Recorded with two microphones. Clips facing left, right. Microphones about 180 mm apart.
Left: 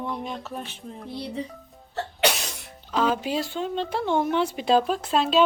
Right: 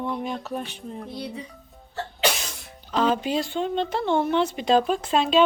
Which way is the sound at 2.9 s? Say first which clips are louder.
Right 1 dB; 5° left (ahead or behind).